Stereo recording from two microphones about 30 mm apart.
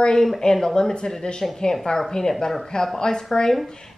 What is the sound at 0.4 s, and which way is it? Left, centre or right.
Speech, centre.